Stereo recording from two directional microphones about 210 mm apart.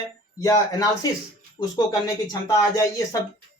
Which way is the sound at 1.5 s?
20° left (ahead or behind).